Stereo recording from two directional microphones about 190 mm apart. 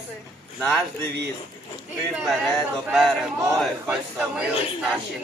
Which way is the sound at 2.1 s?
Centre (ahead or behind).